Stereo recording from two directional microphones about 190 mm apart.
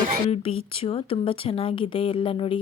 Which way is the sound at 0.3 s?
30° left (ahead or behind).